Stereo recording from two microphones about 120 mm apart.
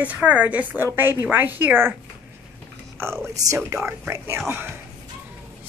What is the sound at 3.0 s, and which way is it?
Speech, 20° right (ahead or behind).